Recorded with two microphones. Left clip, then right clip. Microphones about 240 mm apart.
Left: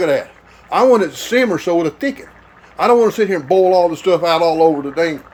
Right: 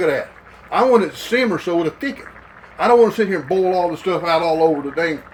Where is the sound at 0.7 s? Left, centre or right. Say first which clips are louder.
Left 3 dB; centre.